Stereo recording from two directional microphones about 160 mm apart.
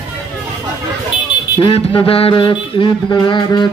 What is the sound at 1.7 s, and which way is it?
Mantra, 35° left (ahead or behind).